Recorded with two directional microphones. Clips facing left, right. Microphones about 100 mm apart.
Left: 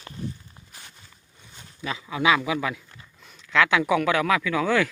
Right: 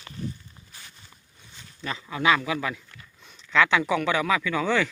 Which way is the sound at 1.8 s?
5° left (ahead or behind).